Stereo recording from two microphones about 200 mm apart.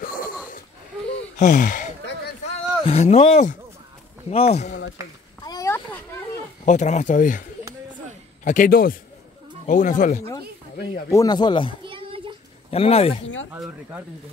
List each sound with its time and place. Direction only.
0.0 s wheeze: 45° left (ahead or behind)
1.4 s speech: 40° left (ahead or behind)
5.4 s a sound: 20° left (ahead or behind)
6.6 s speech: 35° left (ahead or behind)
8.5 s a man's voice: 45° left (ahead or behind)
11.1 s speech: 20° left (ahead or behind)
11.8 s a sound: 25° right (ahead or behind)
12.7 s speech: 30° left (ahead or behind)
13.5 s speech: 5° right (ahead or behind)